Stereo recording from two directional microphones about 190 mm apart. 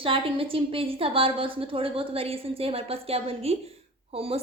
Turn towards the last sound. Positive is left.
turn(degrees=-30)  # may be behind; listen again after turning